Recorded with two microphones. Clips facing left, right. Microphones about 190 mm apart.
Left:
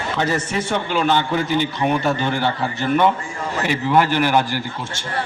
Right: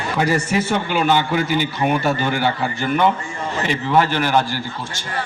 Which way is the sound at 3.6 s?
10° left (ahead or behind).